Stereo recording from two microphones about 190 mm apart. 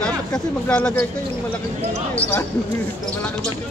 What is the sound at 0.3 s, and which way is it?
Speech, 5° left (ahead or behind).